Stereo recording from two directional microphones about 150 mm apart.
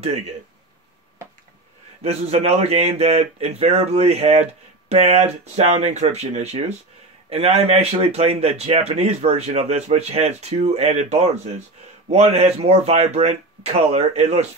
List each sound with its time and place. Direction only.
2.0 s speech: 45° right (ahead or behind)